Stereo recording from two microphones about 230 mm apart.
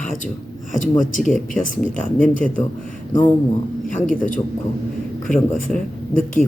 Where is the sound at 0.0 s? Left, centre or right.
Left.